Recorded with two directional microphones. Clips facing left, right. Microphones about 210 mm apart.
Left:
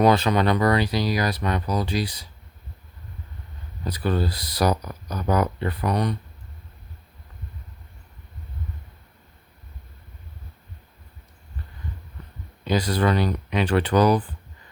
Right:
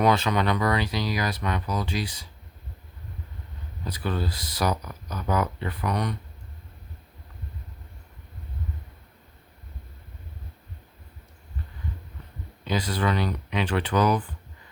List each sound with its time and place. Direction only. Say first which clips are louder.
0.0 s speech: left 4 dB; 35° left (ahead or behind)
3.8 s speech: left 5 dB; 40° left (ahead or behind)
12.6 s speech: left 4 dB; 40° left (ahead or behind)